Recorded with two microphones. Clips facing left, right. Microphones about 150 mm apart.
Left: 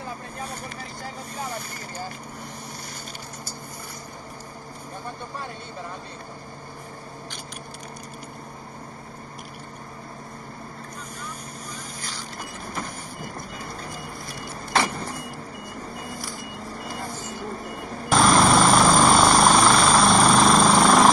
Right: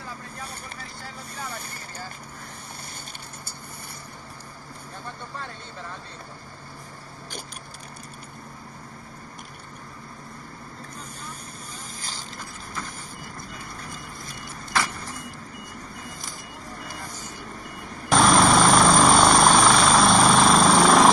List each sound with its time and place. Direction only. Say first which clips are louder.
14.4 s vehicle: left 3 dB; 25° left (ahead or behind)
18.1 s vehicle: even; centre (ahead or behind)